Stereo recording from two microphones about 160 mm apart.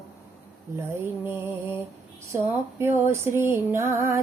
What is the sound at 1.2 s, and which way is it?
Music, 15° right (ahead or behind).